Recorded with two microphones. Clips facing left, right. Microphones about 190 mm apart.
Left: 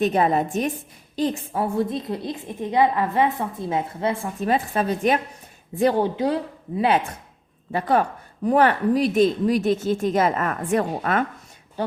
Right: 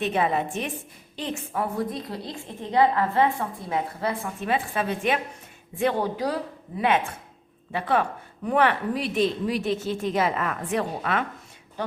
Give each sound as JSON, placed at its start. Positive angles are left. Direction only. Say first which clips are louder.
{"t": 0.0, "sound": "a woman's voice", "louder": "left 4 dB", "side_deg": 40}
{"t": 4.4, "sound": "a woman's voice", "louder": "left 5 dB", "side_deg": 40}
{"t": 6.8, "sound": "a woman's voice", "louder": "left 2 dB", "side_deg": 35}